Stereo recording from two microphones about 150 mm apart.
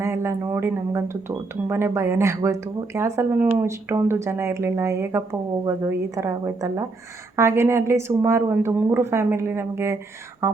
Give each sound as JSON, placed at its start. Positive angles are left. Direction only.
{"t": 0.0, "sound": "speech", "side_deg": -15}